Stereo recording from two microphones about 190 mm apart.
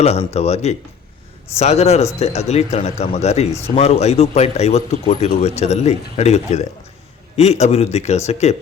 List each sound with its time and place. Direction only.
0.0 s speech: 35° left (ahead or behind)